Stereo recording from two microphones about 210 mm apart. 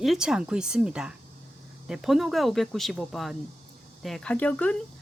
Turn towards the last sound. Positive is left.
turn(degrees=5)  # may be behind; listen again after turning